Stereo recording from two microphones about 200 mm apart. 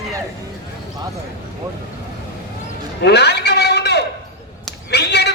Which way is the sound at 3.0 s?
55° left (ahead or behind).